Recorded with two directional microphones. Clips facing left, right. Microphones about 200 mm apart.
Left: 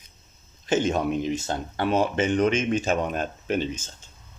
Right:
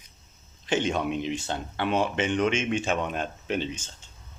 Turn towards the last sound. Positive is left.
turn(degrees=45)  # may be behind; listen again after turning